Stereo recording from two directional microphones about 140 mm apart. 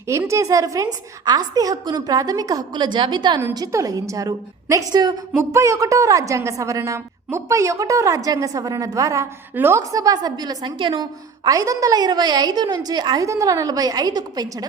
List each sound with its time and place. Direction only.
0.1 s a woman's voice: 20° right (ahead or behind)
11.4 s a woman's voice: 25° right (ahead or behind)